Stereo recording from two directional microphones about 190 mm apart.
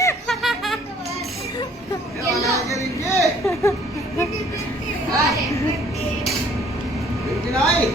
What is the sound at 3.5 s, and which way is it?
Speech, 15° left (ahead or behind).